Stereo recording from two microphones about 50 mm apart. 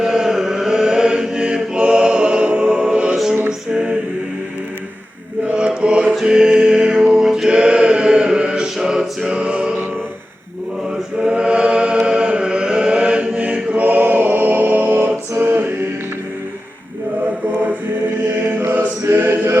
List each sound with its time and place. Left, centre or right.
0.0 s chant: centre
3.7 s mantra: centre
5.5 s mantra: right
6.2 s music: centre
7.2 s mantra: centre
7.5 s chant: centre
9.4 s music: right
10.9 s mantra: centre
12.0 s chant: centre; by 15.1 s right
15.4 s music: right
18.3 s chant: right
19.1 s a sound: right